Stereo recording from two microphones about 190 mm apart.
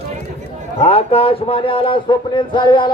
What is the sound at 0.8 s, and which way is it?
Speech, 30° left (ahead or behind).